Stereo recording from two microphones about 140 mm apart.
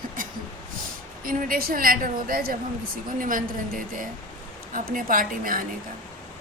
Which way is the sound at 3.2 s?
75° right (ahead or behind).